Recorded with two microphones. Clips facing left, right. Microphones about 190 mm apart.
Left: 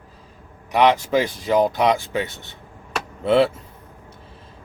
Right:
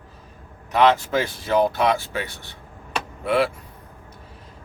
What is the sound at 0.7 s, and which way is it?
Speech, 15° left (ahead or behind).